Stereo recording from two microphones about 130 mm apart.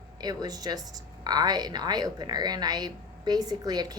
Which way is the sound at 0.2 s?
30° right (ahead or behind).